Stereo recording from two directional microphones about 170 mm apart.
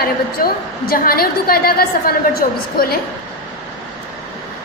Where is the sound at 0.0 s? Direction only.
60° left (ahead or behind).